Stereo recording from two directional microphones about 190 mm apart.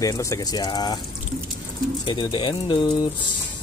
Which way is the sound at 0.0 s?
15° left (ahead or behind).